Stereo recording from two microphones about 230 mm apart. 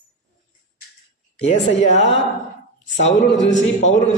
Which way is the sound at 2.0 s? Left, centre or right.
Left.